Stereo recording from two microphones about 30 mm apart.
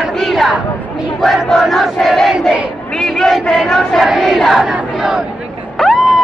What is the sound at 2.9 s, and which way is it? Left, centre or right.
Speech, centre.